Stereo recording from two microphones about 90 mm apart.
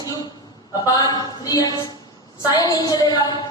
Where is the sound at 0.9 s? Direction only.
45° left (ahead or behind).